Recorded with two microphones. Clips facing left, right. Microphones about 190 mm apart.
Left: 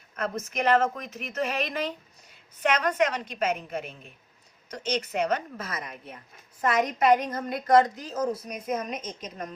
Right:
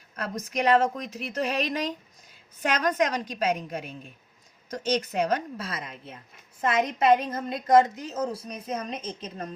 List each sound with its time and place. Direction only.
0.4 s a woman's voice: 35° right (ahead or behind)